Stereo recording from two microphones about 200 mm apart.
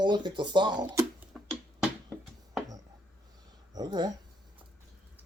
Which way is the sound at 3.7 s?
20° right (ahead or behind).